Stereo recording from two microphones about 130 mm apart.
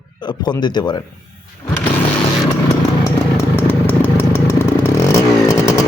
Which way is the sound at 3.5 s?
15° left (ahead or behind).